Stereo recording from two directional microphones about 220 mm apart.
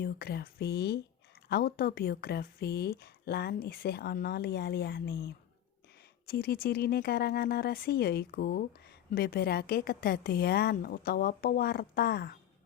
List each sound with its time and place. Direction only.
0.0 s speech: 45° left (ahead or behind)